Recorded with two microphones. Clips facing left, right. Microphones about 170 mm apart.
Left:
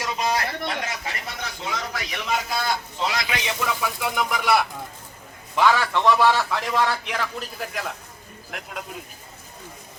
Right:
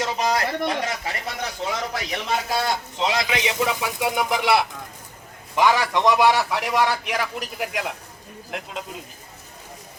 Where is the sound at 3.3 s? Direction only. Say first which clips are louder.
Right 4 dB; 15° right (ahead or behind).